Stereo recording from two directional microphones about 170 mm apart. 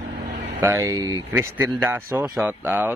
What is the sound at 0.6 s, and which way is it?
A man's voice, 15° right (ahead or behind).